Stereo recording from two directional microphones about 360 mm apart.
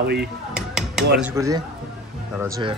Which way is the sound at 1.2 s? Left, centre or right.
Centre.